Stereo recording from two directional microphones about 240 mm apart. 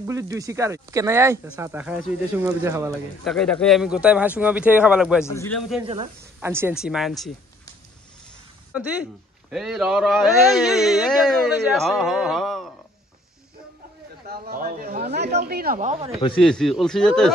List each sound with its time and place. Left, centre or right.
0.0 s speech: centre
3.3 s a man's voice: centre
5.2 s a man's voice: centre
6.4 s a man's voice: centre
8.7 s a man's voice: centre
14.2 s a sound: right
15.4 s a woman's voice: right
16.3 s a man's voice: centre